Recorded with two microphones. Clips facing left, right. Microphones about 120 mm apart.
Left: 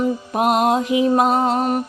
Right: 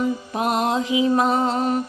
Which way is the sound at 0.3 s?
60° left (ahead or behind).